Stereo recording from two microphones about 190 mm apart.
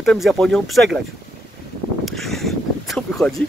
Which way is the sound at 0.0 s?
Centre (ahead or behind).